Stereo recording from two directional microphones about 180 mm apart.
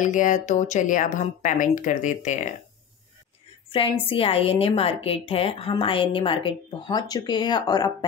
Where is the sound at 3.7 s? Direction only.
30° left (ahead or behind).